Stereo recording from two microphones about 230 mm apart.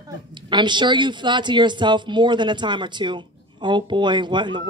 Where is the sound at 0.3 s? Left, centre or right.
Centre.